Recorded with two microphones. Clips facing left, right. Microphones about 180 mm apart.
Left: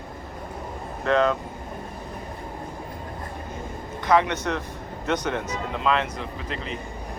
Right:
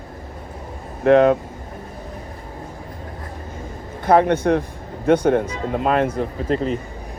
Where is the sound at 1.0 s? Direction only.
55° right (ahead or behind).